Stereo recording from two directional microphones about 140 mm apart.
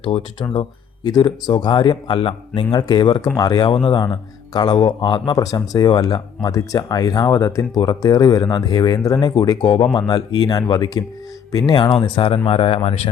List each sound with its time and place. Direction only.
0.0 s speech: 40° left (ahead or behind)